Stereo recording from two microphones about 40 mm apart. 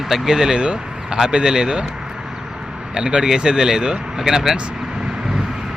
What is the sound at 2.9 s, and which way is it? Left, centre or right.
Speech, right.